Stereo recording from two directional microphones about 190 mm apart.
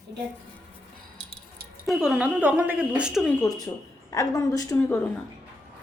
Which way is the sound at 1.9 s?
Centre (ahead or behind).